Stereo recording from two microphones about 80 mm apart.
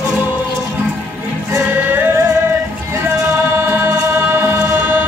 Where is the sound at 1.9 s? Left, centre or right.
Right.